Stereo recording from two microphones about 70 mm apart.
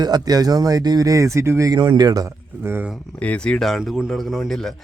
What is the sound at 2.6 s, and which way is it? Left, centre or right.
Speech, right.